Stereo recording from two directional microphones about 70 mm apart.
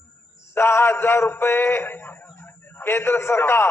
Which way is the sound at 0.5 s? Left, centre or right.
Left.